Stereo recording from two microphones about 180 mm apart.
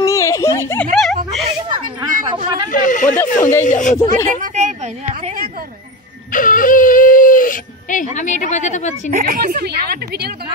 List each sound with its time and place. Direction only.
0.0 s a sound: 15° left (ahead or behind)
0.9 s a sound: 5° left (ahead or behind)
2.2 s a man's voice: 25° right (ahead or behind)
2.7 s speech: 45° left (ahead or behind)
3.2 s speech: 10° left (ahead or behind)
3.6 s speech: 45° left (ahead or behind)
4.4 s a woman's voice: 40° right (ahead or behind)
6.3 s speech: 50° left (ahead or behind)
9.1 s a woman's voice: 55° right (ahead or behind)